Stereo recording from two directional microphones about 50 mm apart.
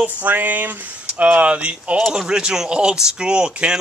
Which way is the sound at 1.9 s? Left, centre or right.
Centre.